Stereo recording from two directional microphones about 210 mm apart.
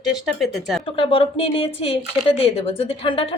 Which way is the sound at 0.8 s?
25° left (ahead or behind).